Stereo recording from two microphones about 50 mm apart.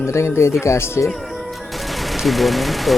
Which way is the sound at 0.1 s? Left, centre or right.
Left.